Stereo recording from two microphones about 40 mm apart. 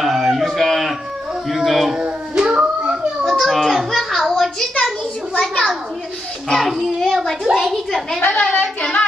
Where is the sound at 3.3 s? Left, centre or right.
Centre.